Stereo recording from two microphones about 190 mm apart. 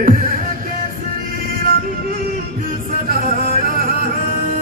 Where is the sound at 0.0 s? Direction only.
50° right (ahead or behind).